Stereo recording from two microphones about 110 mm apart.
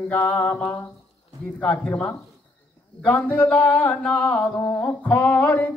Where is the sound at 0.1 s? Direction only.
15° left (ahead or behind).